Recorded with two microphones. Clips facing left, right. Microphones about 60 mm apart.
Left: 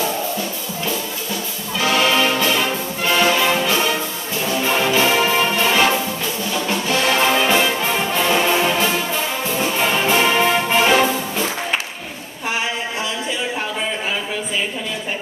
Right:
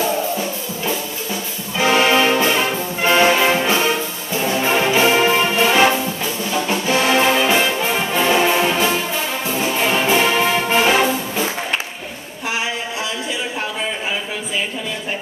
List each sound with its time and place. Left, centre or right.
1.8 s music: right
4.4 s brass instrument: right
7.3 s music: centre
8.2 s brass instrument: centre